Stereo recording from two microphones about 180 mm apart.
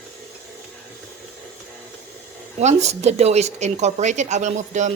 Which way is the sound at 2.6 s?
40° right (ahead or behind).